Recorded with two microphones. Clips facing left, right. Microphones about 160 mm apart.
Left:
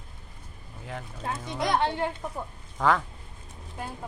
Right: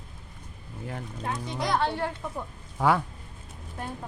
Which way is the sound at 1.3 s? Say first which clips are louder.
Left 1 dB; 20° left (ahead or behind).